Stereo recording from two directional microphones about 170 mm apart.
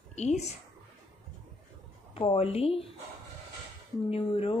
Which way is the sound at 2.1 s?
35° left (ahead or behind).